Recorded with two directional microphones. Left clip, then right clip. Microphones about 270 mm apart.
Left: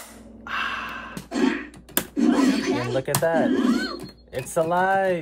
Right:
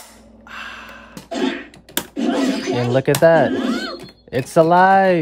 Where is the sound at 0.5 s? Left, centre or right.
Left.